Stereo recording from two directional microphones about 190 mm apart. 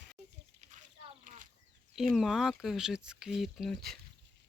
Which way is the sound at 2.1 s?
Centre (ahead or behind).